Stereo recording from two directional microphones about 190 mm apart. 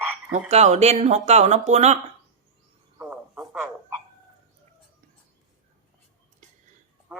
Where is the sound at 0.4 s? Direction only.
35° right (ahead or behind).